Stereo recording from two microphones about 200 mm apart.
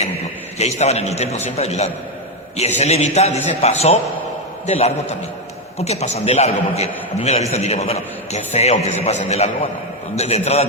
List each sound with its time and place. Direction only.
0.6 s a man's voice: 35° left (ahead or behind)